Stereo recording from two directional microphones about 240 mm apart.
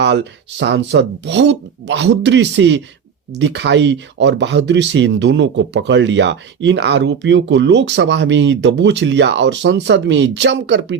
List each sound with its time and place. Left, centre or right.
0.6 s speech: right